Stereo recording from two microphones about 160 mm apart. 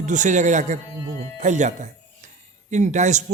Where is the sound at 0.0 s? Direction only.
50° right (ahead or behind).